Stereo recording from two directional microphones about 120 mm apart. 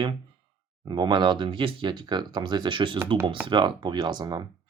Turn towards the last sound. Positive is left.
turn(degrees=-35)  # may be behind; listen again after turning